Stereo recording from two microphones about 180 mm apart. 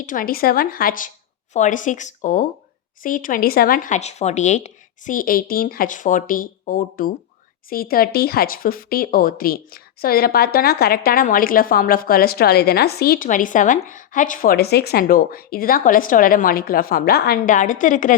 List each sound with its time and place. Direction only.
0.0 s speech: 50° left (ahead or behind)